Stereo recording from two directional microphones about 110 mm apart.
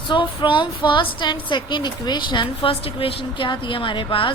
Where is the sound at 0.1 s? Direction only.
45° left (ahead or behind).